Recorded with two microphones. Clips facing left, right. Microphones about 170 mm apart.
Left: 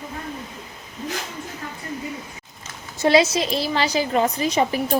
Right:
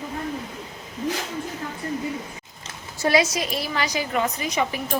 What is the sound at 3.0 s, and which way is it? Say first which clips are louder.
A woman's voice: left 4 dB; 25° left (ahead or behind).